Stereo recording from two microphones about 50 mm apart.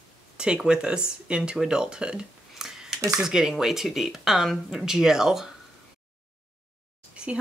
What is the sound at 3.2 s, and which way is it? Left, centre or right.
Speech, centre.